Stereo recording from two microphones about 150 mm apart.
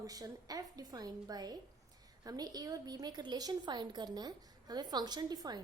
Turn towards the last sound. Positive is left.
turn(degrees=-25)  # may be behind; listen again after turning